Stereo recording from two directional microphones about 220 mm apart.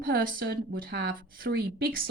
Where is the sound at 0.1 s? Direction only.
45° right (ahead or behind).